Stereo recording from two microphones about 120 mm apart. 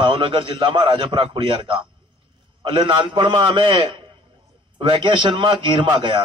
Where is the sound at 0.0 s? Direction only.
45° right (ahead or behind).